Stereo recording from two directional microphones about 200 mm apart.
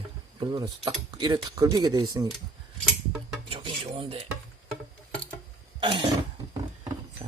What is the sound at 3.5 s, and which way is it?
Filing, 25° right (ahead or behind).